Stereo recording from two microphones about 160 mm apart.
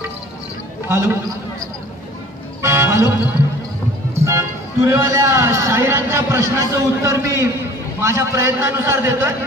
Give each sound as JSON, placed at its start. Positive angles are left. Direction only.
{"t": 0.8, "sound": "a man's voice", "side_deg": -15}
{"t": 2.6, "sound": "music", "side_deg": -15}
{"t": 4.2, "sound": "a man's voice", "side_deg": -15}